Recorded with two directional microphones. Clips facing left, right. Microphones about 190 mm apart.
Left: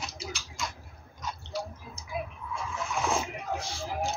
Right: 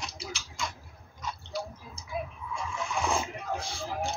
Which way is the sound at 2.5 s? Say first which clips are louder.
Even; centre (ahead or behind).